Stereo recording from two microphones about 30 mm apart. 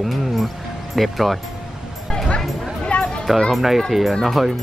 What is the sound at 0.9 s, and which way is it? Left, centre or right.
Speech, centre.